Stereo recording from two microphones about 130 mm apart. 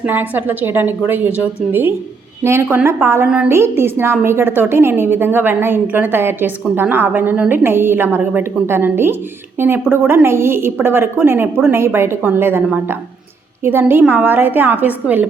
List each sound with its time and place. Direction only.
0.0 s a woman's voice: 15° right (ahead or behind)
3.2 s a woman's voice: 5° right (ahead or behind)
3.5 s a woman's voice: 20° right (ahead or behind)